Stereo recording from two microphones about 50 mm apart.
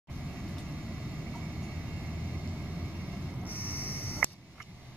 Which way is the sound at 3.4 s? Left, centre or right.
Left.